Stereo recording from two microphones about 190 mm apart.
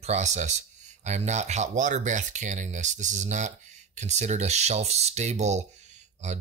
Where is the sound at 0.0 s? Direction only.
35° right (ahead or behind).